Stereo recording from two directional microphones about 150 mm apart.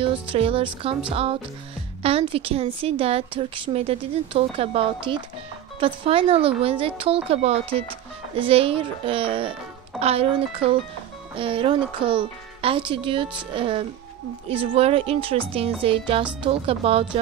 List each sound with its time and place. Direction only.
0.0 s a woman's voice: 35° right (ahead or behind)